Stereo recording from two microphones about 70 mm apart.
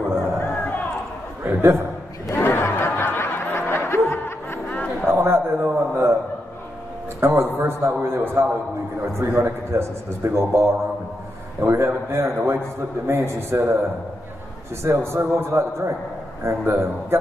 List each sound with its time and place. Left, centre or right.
1.4 s a man's voice: right
2.3 s snicker: left
5.1 s a sound: right
7.2 s a man's voice: right
11.6 s a man's voice: right
14.8 s a man's voice: right